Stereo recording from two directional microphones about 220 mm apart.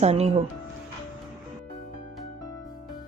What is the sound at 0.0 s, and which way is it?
Speech, 30° right (ahead or behind).